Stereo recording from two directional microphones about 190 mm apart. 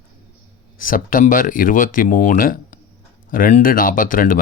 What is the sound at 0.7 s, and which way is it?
Speech, 45° left (ahead or behind).